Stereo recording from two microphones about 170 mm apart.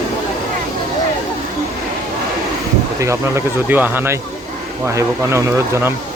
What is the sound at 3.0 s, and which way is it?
Speech, 15° right (ahead or behind).